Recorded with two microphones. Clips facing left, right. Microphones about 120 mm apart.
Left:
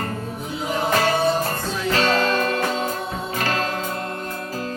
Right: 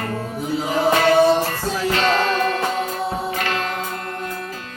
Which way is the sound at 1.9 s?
40° left (ahead or behind).